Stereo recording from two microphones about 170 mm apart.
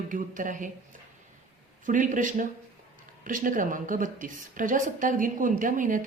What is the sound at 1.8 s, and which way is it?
A woman's voice, 50° right (ahead or behind).